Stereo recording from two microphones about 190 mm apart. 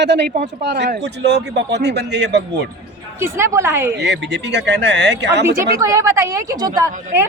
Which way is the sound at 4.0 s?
65° right (ahead or behind).